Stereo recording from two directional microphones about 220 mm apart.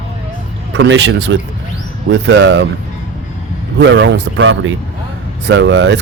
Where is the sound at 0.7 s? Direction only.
55° right (ahead or behind).